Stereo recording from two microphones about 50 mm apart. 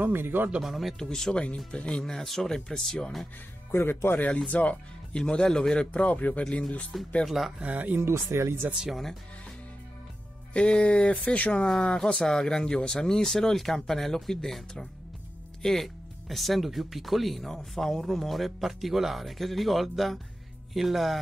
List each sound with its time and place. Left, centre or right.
0.0 s speech: right
0.6 s speech: centre
0.9 s speech: centre
1.3 s speech: left
3.7 s speech: left
4.5 s speech: left
5.1 s speech: centre
6.0 s speech: left
6.9 s speech: centre
7.6 s speech: right
8.0 s speech: right
10.5 s speech: centre